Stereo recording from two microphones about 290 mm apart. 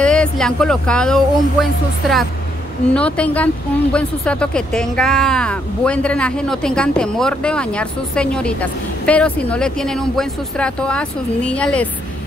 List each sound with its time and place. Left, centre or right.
0.0 s speech: centre